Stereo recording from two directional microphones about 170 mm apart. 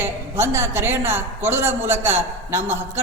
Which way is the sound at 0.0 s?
15° right (ahead or behind).